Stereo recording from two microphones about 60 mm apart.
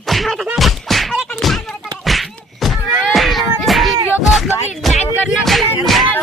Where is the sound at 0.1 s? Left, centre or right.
Centre.